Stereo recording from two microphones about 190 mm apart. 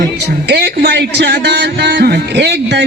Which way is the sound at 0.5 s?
60° right (ahead or behind).